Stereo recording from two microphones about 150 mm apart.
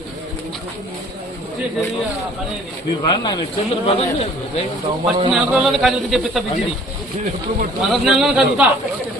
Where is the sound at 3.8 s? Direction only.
40° left (ahead or behind).